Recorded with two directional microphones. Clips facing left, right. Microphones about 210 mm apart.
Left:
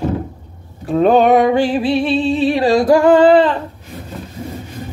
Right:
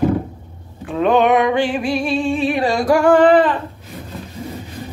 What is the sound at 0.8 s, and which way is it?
Music, 35° left (ahead or behind).